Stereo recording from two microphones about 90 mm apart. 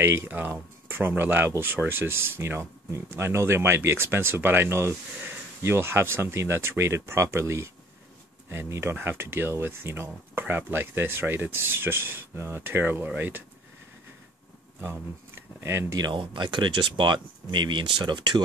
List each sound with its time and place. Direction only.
0.0 s speech: 25° right (ahead or behind)
14.8 s speech: 30° right (ahead or behind)
16.0 s speech: 60° right (ahead or behind)